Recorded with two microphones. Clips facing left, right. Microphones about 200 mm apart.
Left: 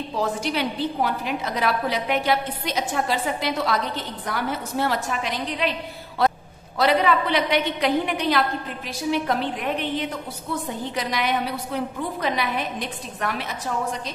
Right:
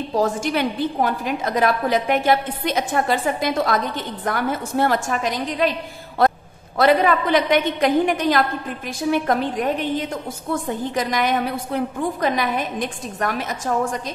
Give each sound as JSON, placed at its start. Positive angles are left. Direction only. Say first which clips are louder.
{"t": 0.1, "sound": "a woman's voice", "louder": "right 5 dB", "side_deg": -45}